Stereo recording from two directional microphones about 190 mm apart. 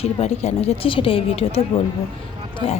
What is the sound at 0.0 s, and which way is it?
A woman's voice, 35° left (ahead or behind).